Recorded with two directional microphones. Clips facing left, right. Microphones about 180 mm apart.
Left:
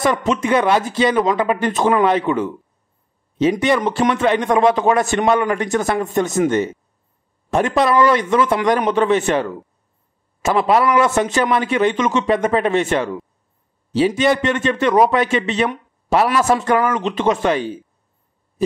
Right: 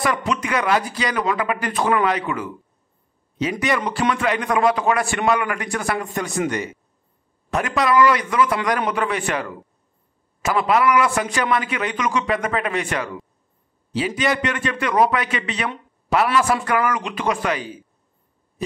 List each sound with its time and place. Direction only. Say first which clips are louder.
0.4 s a man's voice: left 5 dB; 25° left (ahead or behind)